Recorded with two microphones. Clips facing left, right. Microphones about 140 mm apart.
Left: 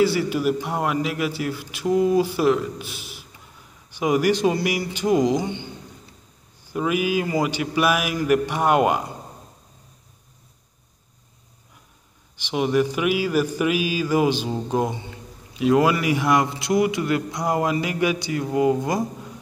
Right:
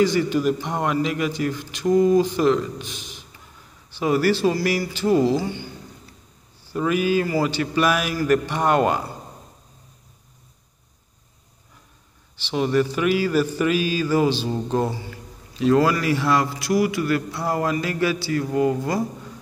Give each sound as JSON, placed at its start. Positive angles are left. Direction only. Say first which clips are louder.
{"t": 0.0, "sound": "speech", "louder": "right 1 dB", "side_deg": 10}
{"t": 12.4, "sound": "speech", "louder": "even", "side_deg": 15}